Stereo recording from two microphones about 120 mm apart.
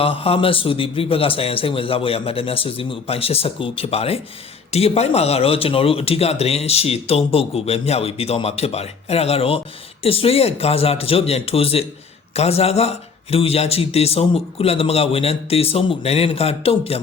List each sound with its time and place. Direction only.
0.0 s a man's voice: 55° left (ahead or behind)